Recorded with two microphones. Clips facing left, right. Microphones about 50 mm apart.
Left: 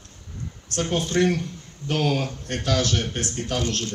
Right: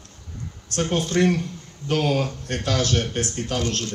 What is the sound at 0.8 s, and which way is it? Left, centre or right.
Speech, left.